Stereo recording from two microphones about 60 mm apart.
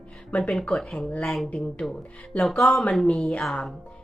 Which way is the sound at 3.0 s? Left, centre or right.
Centre.